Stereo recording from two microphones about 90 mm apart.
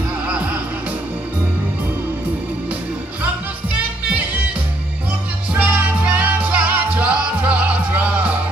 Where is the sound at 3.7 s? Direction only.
15° right (ahead or behind).